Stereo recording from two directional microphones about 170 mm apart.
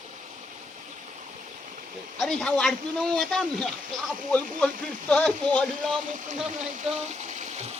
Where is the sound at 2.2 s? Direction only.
5° left (ahead or behind).